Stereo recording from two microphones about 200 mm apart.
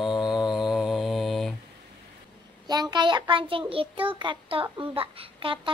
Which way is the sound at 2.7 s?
20° right (ahead or behind).